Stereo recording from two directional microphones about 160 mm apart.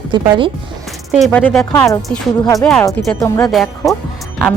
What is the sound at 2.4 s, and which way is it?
Speech, 20° left (ahead or behind).